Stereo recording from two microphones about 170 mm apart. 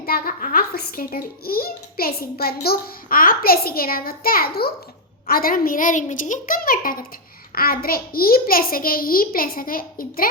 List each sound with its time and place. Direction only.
0.0 s a child's voice: 60° left (ahead or behind)